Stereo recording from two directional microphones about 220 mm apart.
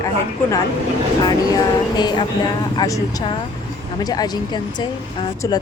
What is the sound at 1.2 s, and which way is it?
Speech, 20° left (ahead or behind).